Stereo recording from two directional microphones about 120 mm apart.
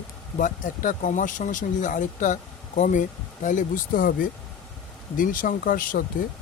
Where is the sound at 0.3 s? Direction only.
90° left.